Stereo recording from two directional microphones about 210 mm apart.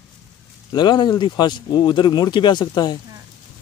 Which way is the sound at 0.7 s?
20° left (ahead or behind).